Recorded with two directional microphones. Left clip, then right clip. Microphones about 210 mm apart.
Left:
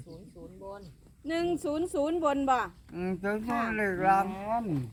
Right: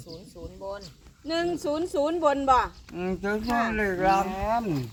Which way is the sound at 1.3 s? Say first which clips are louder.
Right 3 dB; 30° left (ahead or behind).